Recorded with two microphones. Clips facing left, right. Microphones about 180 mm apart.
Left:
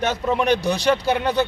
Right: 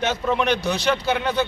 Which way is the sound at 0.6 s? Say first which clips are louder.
Left 2 dB; 35° left (ahead or behind).